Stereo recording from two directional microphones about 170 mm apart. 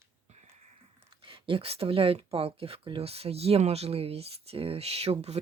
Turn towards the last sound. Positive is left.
turn(degrees=-35)  # may be behind; listen again after turning